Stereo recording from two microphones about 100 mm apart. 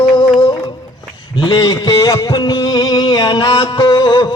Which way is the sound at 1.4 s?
45° left (ahead or behind).